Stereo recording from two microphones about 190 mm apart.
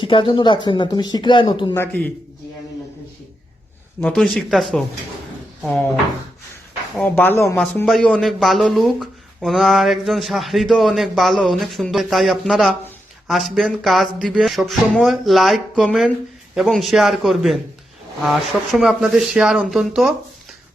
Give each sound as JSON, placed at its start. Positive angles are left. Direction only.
{"t": 0.0, "sound": "speech", "side_deg": 25}
{"t": 1.7, "sound": "speech", "side_deg": 10}
{"t": 4.0, "sound": "speech", "side_deg": 5}
{"t": 6.9, "sound": "speech", "side_deg": 5}